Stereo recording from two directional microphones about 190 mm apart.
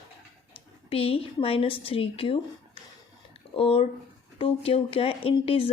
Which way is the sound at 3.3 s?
30° left (ahead or behind).